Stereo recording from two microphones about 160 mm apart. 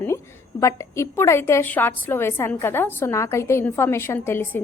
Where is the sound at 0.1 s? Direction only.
15° left (ahead or behind).